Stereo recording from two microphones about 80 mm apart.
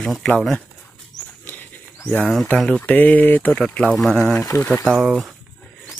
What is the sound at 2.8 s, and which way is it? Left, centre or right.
Mantra, centre.